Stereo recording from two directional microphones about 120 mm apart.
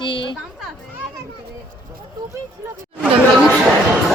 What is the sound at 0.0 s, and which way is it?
Speech, 45° left (ahead or behind).